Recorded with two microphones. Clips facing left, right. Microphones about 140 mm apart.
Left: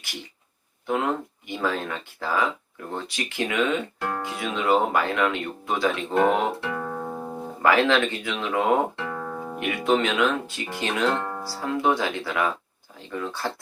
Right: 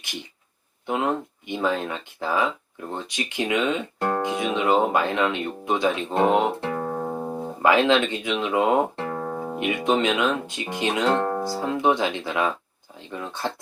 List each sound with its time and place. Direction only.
0.0 s speech: 20° right (ahead or behind)
6.6 s music: 35° right (ahead or behind)
7.6 s speech: 20° right (ahead or behind)
9.0 s music: 40° right (ahead or behind)
9.6 s speech: 20° right (ahead or behind)
11.2 s music: 40° right (ahead or behind)
11.4 s speech: 20° right (ahead or behind)